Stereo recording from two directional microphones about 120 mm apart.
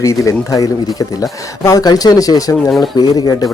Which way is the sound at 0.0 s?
25° left (ahead or behind).